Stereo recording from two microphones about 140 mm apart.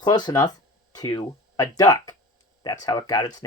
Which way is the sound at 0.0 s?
30° left (ahead or behind).